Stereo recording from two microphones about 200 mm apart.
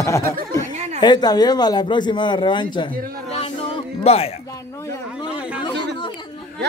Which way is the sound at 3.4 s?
30° left (ahead or behind).